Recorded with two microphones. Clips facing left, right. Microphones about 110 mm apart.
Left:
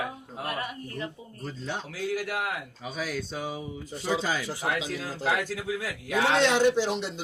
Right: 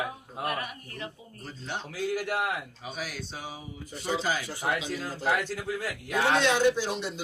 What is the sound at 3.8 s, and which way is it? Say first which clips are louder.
Speech: left 1 dB; 90° left.